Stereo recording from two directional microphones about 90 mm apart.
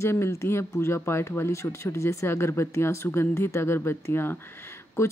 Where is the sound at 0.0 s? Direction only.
30° left (ahead or behind).